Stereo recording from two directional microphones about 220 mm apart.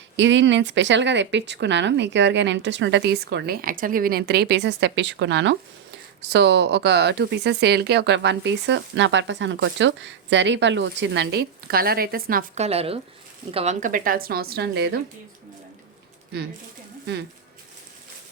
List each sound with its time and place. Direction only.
0.2 s a woman's voice: 55° right (ahead or behind)